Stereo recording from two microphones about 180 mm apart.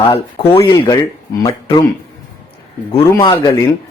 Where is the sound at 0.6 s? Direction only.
20° left (ahead or behind).